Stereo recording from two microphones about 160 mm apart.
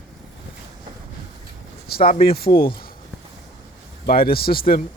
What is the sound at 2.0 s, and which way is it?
Speech, 35° left (ahead or behind).